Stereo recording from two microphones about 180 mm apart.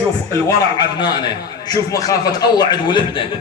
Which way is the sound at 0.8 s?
25° left (ahead or behind).